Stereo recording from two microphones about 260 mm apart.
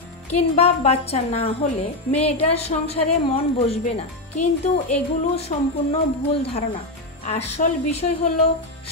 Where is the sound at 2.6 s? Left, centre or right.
Left.